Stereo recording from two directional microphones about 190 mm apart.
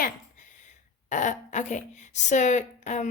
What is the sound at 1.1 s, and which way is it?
Speech, 40° left (ahead or behind).